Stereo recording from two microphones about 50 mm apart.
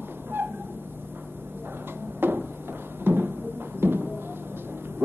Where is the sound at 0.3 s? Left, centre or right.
Right.